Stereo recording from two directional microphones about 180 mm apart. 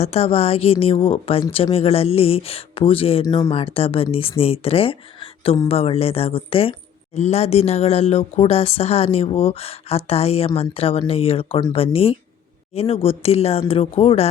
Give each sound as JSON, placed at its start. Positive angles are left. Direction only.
{"t": 0.0, "sound": "speech", "side_deg": 35}
{"t": 3.2, "sound": "speech", "side_deg": 20}
{"t": 3.5, "sound": "speech", "side_deg": 30}